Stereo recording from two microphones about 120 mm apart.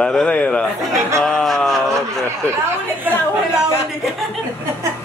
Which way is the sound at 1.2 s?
5° left (ahead or behind).